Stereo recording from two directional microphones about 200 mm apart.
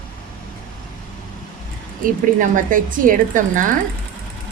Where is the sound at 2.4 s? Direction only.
40° right (ahead or behind).